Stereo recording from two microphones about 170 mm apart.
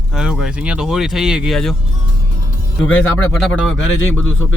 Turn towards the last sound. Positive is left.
turn(degrees=10)  # may be behind; listen again after turning